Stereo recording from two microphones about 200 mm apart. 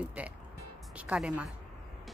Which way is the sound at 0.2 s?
5° right (ahead or behind).